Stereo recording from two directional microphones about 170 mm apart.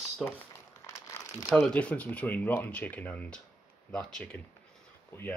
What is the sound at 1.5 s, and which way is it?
Speech, 5° left (ahead or behind).